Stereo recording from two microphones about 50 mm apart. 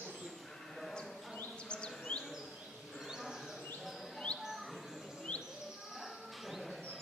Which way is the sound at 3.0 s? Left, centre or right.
Centre.